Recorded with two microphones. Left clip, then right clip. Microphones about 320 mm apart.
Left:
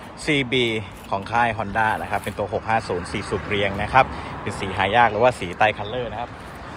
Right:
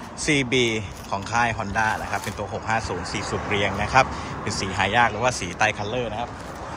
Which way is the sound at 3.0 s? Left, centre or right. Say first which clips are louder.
Even; right.